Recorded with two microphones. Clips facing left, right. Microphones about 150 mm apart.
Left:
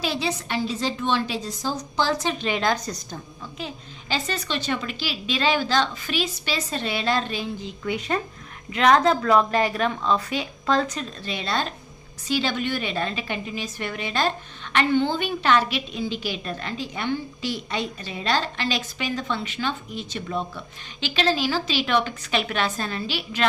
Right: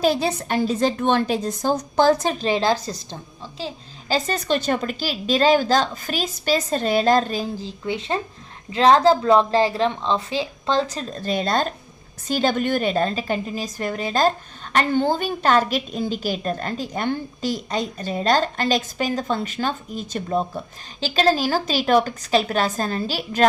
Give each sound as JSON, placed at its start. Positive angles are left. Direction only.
{"t": 0.0, "sound": "a woman's voice", "side_deg": -45}
{"t": 4.1, "sound": "a woman's voice", "side_deg": -45}